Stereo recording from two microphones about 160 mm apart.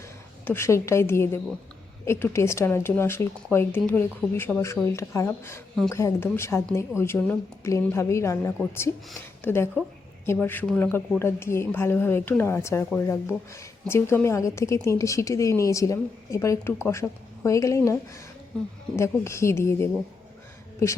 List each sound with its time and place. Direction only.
0.4 s speech: 15° left (ahead or behind)